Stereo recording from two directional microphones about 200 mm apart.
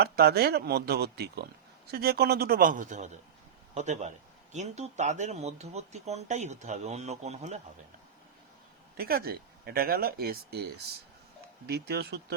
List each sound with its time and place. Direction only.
0.0 s speech: 50° right (ahead or behind); by 7.6 s 35° right (ahead or behind)
9.0 s speech: 50° right (ahead or behind)
11.7 s speech: 55° right (ahead or behind)